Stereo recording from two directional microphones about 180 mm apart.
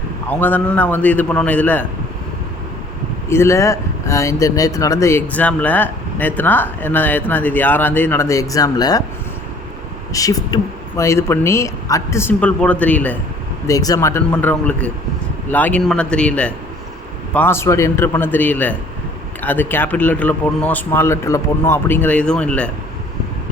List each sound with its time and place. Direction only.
0.3 s speech: 10° left (ahead or behind)
3.2 s speech: 15° left (ahead or behind)
10.1 s speech: 20° left (ahead or behind)
13.7 s speech: 20° left (ahead or behind)